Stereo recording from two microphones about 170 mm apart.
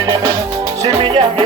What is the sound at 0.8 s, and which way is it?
Music, 30° right (ahead or behind).